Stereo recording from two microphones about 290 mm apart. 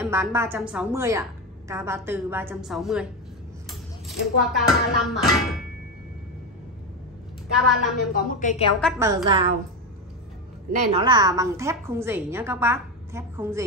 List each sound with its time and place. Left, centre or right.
0.0 s a woman's voice: centre
8.1 s a woman's voice: left
9.0 s a woman's voice: centre
10.7 s a woman's voice: right